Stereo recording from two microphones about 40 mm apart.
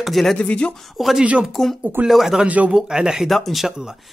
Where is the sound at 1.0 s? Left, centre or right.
Centre.